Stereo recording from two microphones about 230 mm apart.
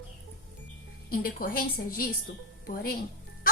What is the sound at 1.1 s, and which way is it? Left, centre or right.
A woman's voice, left.